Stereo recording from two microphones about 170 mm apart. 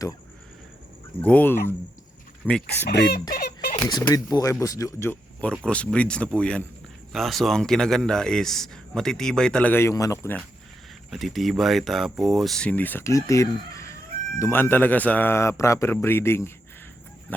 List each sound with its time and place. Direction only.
1.2 s speech: 10° left (ahead or behind)
2.6 s speech: 85° left
3.3 s a sound: 65° left (ahead or behind)
3.8 s speech: 25° left (ahead or behind)
11.1 s speech: centre (ahead or behind)